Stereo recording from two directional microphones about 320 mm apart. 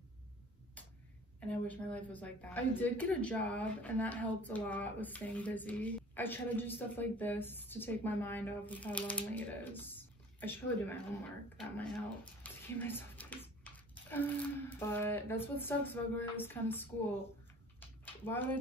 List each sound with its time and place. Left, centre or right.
1.5 s a woman's voice: centre
12.4 s speech: centre
17.7 s a sound: centre